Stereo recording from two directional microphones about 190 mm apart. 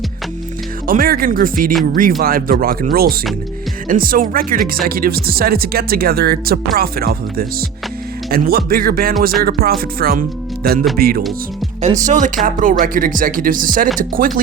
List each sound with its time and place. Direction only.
0.9 s speech: 50° right (ahead or behind)
11.9 s speech: 40° right (ahead or behind)